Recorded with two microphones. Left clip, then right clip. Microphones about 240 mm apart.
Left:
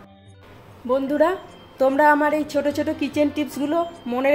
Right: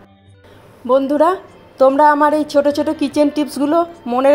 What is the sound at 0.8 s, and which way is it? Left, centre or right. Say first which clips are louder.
A woman's voice: right 6 dB; right.